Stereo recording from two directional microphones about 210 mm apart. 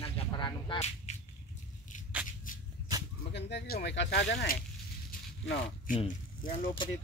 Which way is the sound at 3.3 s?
55° left (ahead or behind).